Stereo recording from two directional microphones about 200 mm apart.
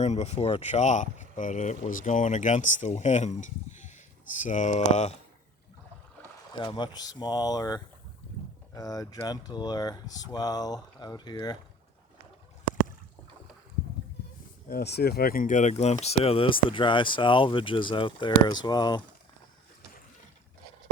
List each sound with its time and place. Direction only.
0.0 s speech: 30° left (ahead or behind)
6.5 s speech: 20° left (ahead or behind)
14.7 s speech: 55° left (ahead or behind); by 19.0 s 20° left (ahead or behind)